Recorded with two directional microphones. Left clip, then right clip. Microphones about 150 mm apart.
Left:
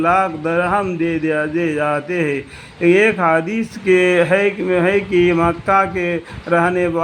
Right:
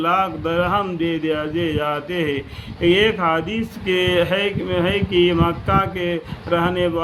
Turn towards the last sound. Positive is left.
turn(degrees=45)  # may be behind; listen again after turning